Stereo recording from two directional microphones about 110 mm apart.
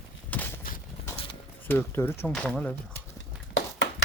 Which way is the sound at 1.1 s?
55° left (ahead or behind).